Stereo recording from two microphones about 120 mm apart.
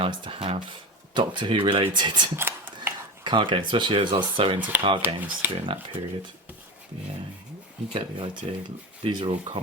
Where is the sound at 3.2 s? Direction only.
45° right (ahead or behind).